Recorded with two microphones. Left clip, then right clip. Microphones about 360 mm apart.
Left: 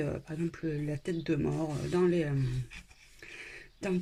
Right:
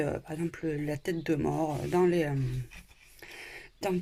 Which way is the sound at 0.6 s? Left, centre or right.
Right.